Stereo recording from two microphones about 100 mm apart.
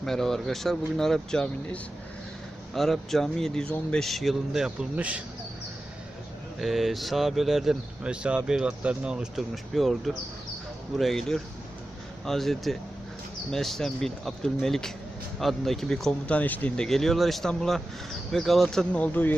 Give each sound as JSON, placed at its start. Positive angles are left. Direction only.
{"t": 0.0, "sound": "speech", "side_deg": 5}
{"t": 6.6, "sound": "speech", "side_deg": 0}